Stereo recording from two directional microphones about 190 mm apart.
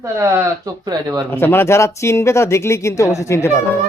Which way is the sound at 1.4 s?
10° left (ahead or behind).